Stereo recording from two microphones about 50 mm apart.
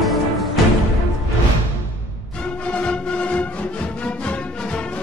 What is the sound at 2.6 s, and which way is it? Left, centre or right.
Music, left.